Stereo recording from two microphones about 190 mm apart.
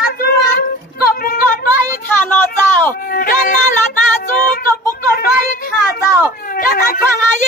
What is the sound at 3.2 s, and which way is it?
Music, 45° left (ahead or behind).